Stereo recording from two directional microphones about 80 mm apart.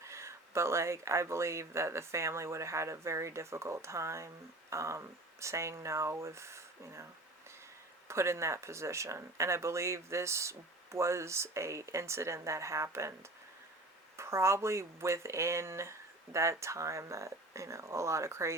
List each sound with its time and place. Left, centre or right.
0.0 s speech: right
14.2 s speech: right